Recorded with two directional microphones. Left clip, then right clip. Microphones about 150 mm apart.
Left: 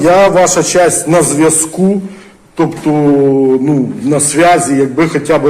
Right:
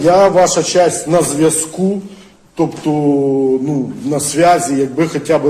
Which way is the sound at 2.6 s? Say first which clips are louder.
Left 3 dB; 30° right (ahead or behind).